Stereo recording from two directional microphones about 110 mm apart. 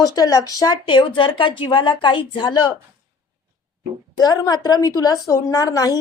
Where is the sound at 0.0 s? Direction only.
35° left (ahead or behind).